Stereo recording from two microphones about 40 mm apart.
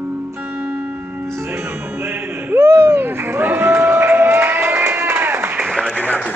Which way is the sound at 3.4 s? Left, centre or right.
Right.